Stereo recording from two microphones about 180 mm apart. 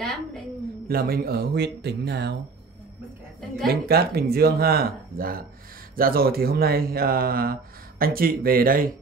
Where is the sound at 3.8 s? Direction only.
60° right (ahead or behind).